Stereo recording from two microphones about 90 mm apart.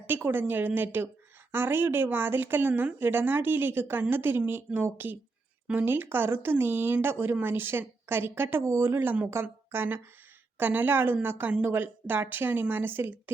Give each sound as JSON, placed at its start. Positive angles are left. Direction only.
{"t": 0.1, "sound": "a woman's voice", "side_deg": -20}